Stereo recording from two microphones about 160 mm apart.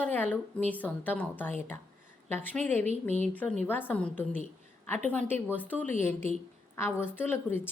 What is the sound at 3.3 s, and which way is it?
A woman's voice, 10° left (ahead or behind).